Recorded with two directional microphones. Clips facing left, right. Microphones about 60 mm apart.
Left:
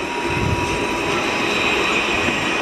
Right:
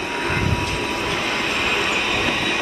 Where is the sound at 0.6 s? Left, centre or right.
Centre.